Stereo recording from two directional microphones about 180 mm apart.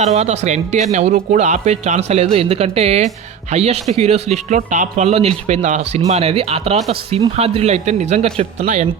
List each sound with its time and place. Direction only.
0.0 s speech: 40° right (ahead or behind)